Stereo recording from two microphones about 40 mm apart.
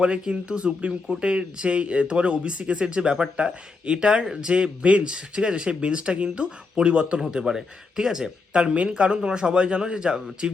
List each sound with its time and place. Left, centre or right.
0.0 s speech: right
7.2 s speech: centre
8.5 s speech: right